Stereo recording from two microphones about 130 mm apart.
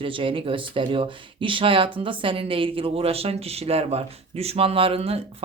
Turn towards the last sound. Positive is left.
turn(degrees=-50)  # may be behind; listen again after turning